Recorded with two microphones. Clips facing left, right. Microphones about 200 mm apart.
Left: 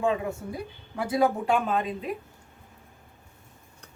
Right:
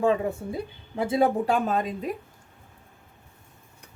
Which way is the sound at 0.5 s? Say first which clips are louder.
Right 3 dB; 25° right (ahead or behind).